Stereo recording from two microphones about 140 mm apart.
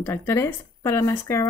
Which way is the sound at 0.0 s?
20° left (ahead or behind).